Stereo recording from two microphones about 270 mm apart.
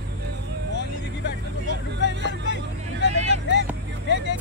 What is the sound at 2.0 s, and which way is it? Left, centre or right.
Music, left.